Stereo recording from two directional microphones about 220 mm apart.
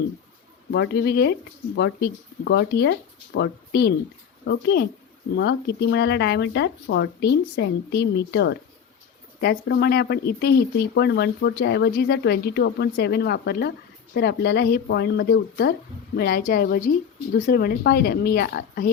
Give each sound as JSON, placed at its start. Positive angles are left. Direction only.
{"t": 0.7, "sound": "speech", "side_deg": 50}